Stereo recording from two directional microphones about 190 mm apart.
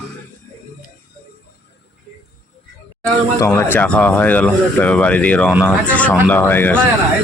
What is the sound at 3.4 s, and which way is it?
Speech, 10° left (ahead or behind).